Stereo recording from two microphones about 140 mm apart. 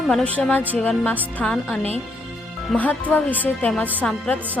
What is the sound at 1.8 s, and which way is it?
Speech, 45° right (ahead or behind).